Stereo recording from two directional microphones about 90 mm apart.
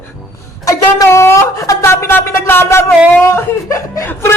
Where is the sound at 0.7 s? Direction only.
35° left (ahead or behind).